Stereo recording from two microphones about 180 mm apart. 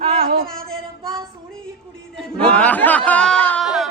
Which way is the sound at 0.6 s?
5° left (ahead or behind).